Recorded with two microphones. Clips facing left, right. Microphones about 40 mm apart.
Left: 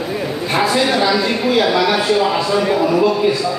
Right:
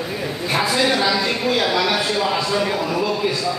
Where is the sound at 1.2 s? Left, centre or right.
Centre.